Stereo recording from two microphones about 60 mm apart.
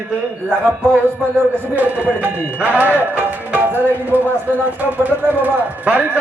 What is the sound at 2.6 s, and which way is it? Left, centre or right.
Speech, right.